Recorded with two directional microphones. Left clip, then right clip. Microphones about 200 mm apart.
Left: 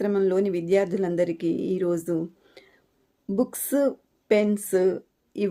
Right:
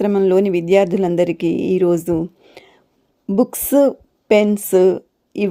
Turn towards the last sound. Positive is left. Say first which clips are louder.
# right 7 dB
turn(degrees=-30)  # may be behind; listen again after turning